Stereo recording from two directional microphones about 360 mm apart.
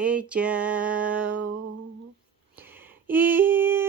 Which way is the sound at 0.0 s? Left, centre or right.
Centre.